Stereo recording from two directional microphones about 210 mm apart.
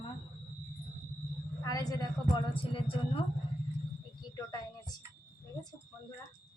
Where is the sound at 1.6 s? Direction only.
15° left (ahead or behind).